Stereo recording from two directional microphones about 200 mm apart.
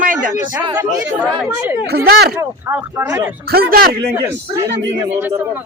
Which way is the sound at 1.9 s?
50° right (ahead or behind).